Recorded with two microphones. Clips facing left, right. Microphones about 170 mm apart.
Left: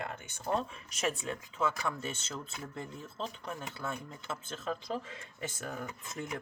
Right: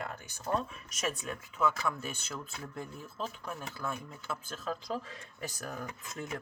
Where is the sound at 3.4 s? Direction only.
25° left (ahead or behind).